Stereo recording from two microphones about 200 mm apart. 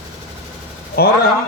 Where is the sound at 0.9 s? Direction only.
50° left (ahead or behind).